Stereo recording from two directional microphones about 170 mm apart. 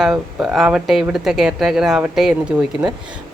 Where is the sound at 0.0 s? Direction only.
5° right (ahead or behind).